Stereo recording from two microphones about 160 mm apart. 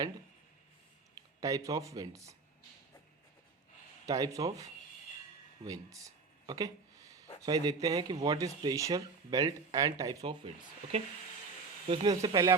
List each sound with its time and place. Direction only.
1.4 s speech: 20° right (ahead or behind)
4.0 s speech: 20° right (ahead or behind)
11.9 s speech: 30° right (ahead or behind)
12.2 s speech: 20° right (ahead or behind)